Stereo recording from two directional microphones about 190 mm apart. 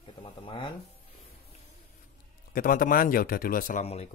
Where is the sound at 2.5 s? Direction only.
45° left (ahead or behind).